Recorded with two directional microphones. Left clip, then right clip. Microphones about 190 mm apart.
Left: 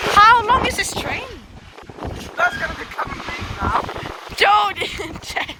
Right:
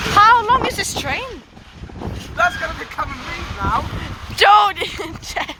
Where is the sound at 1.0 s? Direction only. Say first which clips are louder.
Right 2 dB; 25° right (ahead or behind).